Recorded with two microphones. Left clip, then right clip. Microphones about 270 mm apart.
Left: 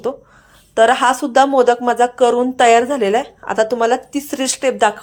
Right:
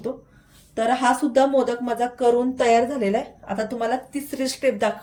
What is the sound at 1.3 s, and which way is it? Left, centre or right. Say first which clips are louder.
Speech: left 7 dB; centre.